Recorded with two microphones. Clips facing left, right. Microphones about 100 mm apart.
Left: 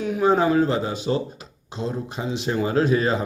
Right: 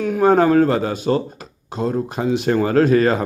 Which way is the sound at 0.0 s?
50° right (ahead or behind).